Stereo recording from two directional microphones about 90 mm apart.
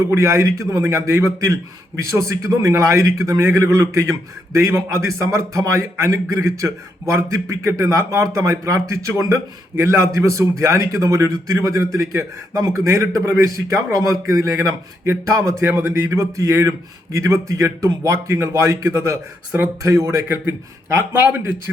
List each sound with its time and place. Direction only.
0.1 s a man's voice: 35° right (ahead or behind)
19.5 s a man's voice: 20° right (ahead or behind)
19.8 s a man's voice: 35° right (ahead or behind)